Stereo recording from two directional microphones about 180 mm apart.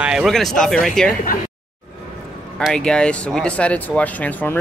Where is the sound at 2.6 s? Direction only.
5° left (ahead or behind).